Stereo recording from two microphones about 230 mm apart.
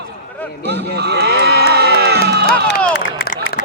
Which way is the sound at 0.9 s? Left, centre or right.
Right.